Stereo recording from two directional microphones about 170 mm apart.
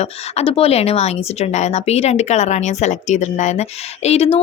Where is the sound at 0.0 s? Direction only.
35° left (ahead or behind).